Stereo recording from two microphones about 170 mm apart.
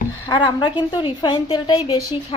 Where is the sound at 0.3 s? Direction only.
25° left (ahead or behind).